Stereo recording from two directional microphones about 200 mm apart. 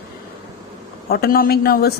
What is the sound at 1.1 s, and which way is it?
Speech, 50° left (ahead or behind).